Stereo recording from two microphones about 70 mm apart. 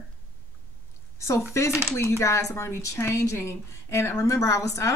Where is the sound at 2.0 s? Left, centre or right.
Left.